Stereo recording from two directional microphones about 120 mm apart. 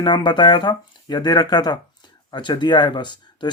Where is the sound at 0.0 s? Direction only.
40° left (ahead or behind).